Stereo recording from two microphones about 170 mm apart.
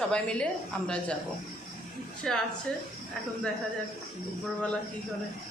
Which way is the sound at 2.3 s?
5° left (ahead or behind).